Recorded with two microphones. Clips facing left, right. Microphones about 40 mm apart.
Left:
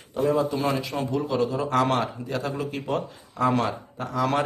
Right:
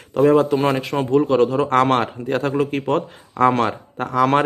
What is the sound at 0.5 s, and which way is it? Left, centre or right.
A man's voice, right.